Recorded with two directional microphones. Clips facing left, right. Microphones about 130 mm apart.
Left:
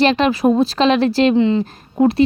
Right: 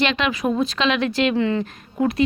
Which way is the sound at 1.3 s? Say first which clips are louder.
Left 6 dB; 20° left (ahead or behind).